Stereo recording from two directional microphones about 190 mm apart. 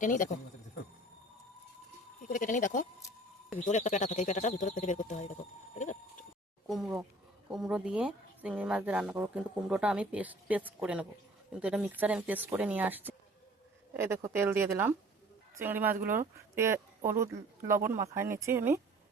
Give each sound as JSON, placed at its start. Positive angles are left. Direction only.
{"t": 0.0, "sound": "speech", "side_deg": 45}
{"t": 2.2, "sound": "speech", "side_deg": 45}
{"t": 5.8, "sound": "a sound", "side_deg": 40}
{"t": 6.7, "sound": "speech", "side_deg": 0}